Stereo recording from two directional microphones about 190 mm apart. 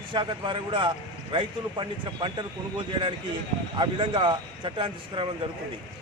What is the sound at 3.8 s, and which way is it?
A man's voice, 25° right (ahead or behind).